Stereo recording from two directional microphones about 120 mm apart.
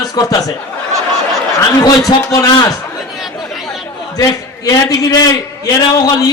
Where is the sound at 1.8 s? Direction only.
30° left (ahead or behind).